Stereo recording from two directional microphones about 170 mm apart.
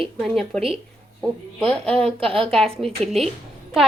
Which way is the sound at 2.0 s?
35° right (ahead or behind).